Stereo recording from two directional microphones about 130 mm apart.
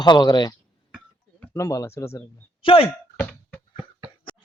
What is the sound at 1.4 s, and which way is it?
Speech, 20° left (ahead or behind).